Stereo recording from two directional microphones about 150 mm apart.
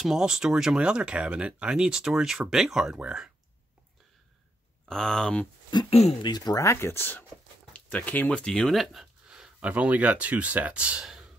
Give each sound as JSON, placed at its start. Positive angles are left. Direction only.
{"t": 0.0, "sound": "speech", "side_deg": -5}
{"t": 4.8, "sound": "speech", "side_deg": 5}
{"t": 5.9, "sound": "speech", "side_deg": 45}
{"t": 6.2, "sound": "speech", "side_deg": 25}